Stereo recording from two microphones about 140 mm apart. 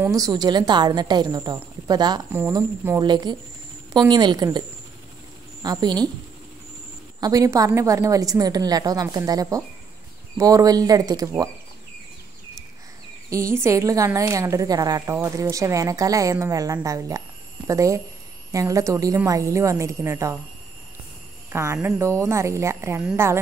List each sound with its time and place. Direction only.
0.0 s a woman's voice: 25° right (ahead or behind)
7.2 s a woman's voice: 25° right (ahead or behind)
13.3 s a woman's voice: 20° right (ahead or behind)
21.5 s a woman's voice: 20° right (ahead or behind)